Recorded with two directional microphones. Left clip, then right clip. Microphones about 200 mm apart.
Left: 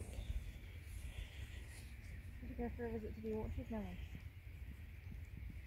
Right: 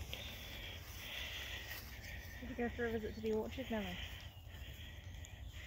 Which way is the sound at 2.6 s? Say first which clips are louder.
Right 5 dB; 45° right (ahead or behind).